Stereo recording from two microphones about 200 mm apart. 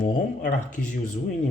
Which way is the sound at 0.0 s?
45° left (ahead or behind).